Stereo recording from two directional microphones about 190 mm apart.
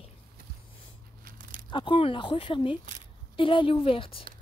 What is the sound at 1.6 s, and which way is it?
Speech, 25° left (ahead or behind).